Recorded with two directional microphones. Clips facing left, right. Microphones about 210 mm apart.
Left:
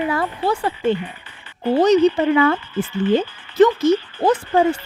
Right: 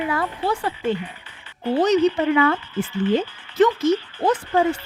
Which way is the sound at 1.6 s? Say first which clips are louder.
Left 4 dB; 40° left (ahead or behind).